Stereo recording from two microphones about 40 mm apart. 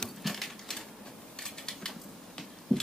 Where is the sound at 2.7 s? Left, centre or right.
Centre.